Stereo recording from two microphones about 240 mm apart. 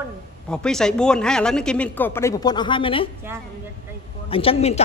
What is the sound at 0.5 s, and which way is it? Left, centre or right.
Speech, centre.